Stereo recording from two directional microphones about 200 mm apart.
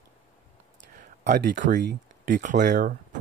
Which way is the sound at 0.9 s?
45° right (ahead or behind).